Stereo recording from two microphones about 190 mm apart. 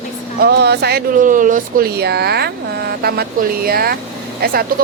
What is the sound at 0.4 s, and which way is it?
Speech, 60° right (ahead or behind).